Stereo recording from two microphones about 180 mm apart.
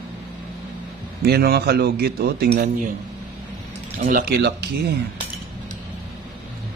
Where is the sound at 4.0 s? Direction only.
50° right (ahead or behind).